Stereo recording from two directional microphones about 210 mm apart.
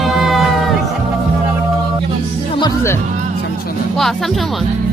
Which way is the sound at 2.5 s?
15° left (ahead or behind).